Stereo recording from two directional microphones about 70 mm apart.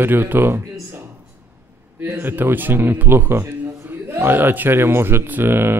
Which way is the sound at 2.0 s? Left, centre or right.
Right.